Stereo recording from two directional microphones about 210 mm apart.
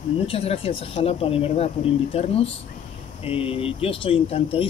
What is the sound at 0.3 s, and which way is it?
Speech, 25° left (ahead or behind).